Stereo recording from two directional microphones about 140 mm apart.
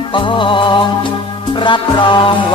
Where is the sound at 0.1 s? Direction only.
35° left (ahead or behind).